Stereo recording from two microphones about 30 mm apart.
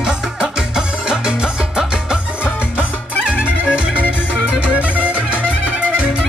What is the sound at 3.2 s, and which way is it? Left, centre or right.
Music, right.